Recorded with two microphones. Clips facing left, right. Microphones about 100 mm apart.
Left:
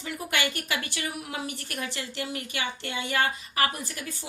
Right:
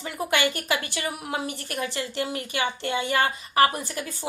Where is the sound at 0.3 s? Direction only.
20° right (ahead or behind).